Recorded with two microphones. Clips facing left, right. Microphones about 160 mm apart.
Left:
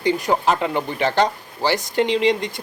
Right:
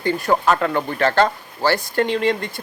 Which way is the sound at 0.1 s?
15° left (ahead or behind).